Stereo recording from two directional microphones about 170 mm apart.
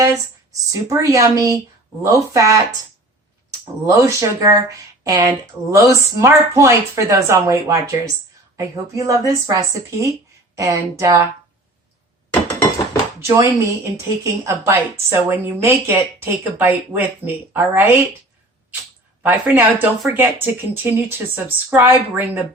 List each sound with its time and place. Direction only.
0.7 s speech: 20° right (ahead or behind)
3.8 s a woman's voice: 20° right (ahead or behind)
12.3 s a sound: 10° left (ahead or behind)
13.2 s a woman's voice: 20° right (ahead or behind)
19.2 s a woman's voice: 15° right (ahead or behind)